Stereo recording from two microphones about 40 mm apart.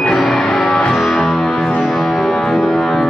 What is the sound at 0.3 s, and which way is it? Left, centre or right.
Music, centre.